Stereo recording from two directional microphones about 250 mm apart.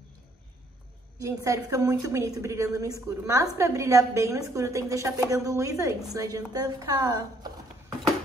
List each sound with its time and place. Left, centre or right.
1.2 s a woman's voice: centre